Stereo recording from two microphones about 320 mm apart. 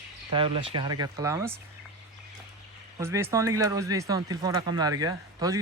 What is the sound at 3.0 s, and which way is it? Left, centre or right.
Speech, centre.